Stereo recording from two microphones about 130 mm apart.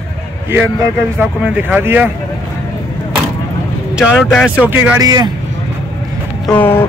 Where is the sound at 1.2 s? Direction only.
15° right (ahead or behind).